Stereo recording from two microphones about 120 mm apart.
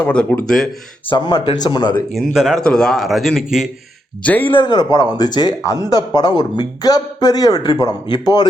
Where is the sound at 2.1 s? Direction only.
Centre (ahead or behind).